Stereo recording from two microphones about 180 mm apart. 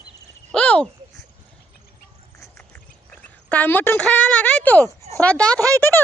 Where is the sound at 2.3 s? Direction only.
15° left (ahead or behind).